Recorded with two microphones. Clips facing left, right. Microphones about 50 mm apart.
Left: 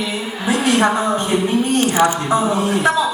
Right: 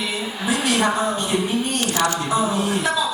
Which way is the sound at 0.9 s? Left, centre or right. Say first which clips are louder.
Left 4 dB; left.